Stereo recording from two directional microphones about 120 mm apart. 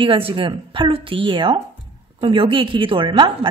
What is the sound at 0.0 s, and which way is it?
A woman's voice, 45° right (ahead or behind).